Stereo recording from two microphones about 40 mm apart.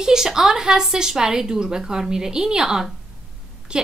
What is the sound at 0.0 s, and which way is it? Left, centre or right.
A woman's voice, centre.